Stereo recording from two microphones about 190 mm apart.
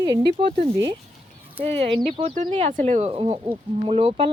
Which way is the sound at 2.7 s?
40° right (ahead or behind).